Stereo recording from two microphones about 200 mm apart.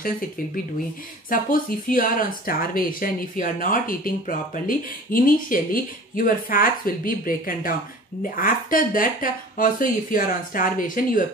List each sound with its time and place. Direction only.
1.3 s speech: 45° left (ahead or behind)